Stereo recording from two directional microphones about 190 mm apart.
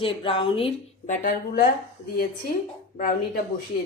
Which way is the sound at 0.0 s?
25° left (ahead or behind).